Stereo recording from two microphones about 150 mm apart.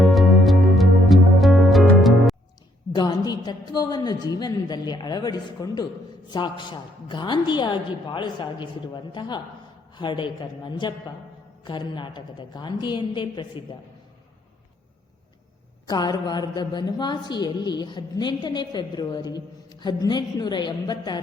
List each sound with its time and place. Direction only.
0.1 s music: centre (ahead or behind)
2.9 s a woman's voice: 25° left (ahead or behind)
15.9 s a woman's voice: 25° left (ahead or behind)